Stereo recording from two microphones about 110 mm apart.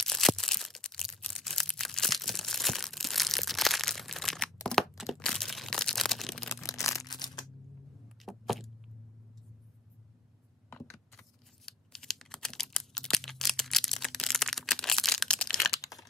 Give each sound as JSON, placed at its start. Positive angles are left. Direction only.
{"t": 0.0, "sound": "a sound", "side_deg": 5}
{"t": 8.3, "sound": "vehicle", "side_deg": 0}
{"t": 11.1, "sound": "scissors", "side_deg": 5}
{"t": 15.8, "sound": "crumpling", "side_deg": 30}